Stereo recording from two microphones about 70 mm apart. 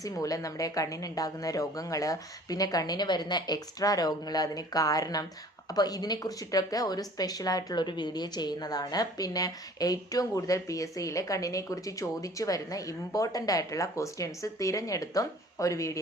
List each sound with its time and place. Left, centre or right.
0.0 s speech: left